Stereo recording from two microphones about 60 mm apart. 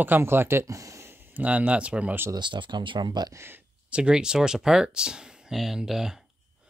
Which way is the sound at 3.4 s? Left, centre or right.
Right.